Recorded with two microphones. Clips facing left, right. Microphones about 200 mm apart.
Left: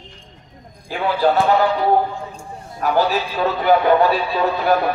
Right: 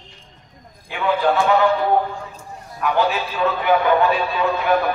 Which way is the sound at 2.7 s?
40° left (ahead or behind).